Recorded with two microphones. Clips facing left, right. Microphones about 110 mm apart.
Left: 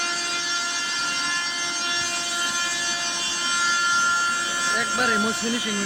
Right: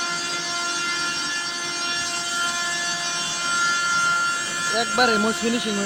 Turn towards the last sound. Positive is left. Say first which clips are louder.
# right 4 dB
turn(degrees=-65)  # may be behind; listen again after turning